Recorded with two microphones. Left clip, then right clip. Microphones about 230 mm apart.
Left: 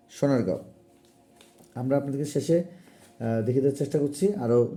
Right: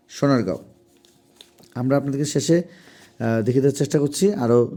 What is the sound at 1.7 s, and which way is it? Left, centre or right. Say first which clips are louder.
Speech: right 5 dB; right.